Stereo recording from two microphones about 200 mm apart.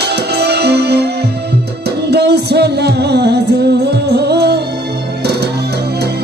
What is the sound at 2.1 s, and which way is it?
Music, 55° right (ahead or behind).